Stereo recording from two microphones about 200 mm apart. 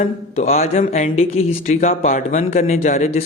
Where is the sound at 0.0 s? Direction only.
35° left (ahead or behind).